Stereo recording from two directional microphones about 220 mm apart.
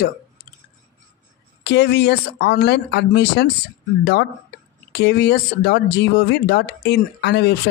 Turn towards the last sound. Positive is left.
turn(degrees=50)  # may be behind; listen again after turning